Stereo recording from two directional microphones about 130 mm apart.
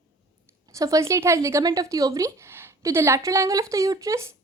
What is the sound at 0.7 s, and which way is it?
A woman's voice, 25° right (ahead or behind).